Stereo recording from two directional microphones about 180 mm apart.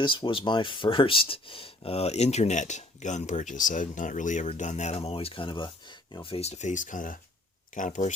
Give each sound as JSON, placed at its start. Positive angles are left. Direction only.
{"t": 0.0, "sound": "speech", "side_deg": 25}